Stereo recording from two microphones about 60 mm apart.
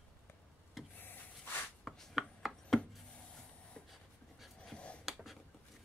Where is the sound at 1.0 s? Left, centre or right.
Left.